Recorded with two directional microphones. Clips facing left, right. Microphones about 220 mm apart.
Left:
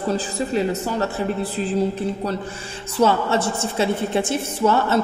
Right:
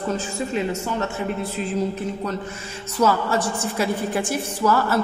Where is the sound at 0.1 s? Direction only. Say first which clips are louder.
Left 3 dB; 35° left (ahead or behind).